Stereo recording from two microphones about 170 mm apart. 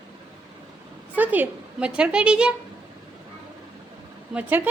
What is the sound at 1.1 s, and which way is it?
A woman's voice, 10° right (ahead or behind).